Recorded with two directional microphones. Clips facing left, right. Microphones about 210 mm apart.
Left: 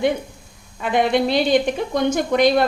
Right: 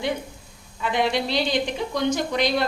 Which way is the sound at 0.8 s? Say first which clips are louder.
Left 5 dB; 50° left (ahead or behind).